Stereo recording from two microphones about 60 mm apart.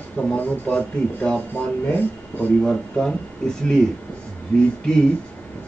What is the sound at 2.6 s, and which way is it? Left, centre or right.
Speech, centre.